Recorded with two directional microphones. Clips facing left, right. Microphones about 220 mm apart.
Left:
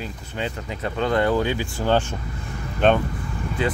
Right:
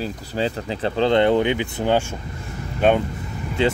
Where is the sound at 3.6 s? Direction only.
25° right (ahead or behind).